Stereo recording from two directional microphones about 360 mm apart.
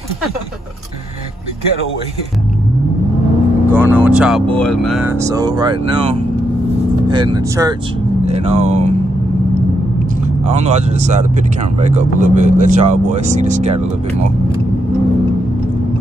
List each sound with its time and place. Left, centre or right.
3.7 s speech: centre
7.1 s speech: centre
10.4 s speech: centre